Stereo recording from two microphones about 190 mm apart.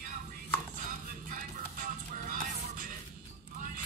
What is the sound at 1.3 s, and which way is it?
Music, 45° right (ahead or behind).